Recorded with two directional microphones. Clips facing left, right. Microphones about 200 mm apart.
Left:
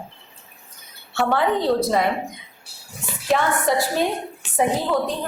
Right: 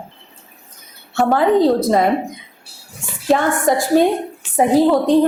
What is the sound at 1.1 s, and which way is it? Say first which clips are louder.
Speech: right 6 dB; 40° right (ahead or behind).